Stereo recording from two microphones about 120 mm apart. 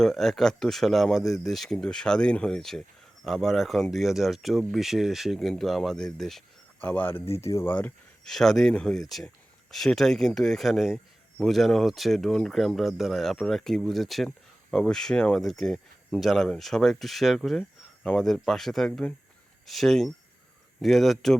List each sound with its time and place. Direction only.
0.0 s speech: centre (ahead or behind)
8.2 s speech: 5° left (ahead or behind)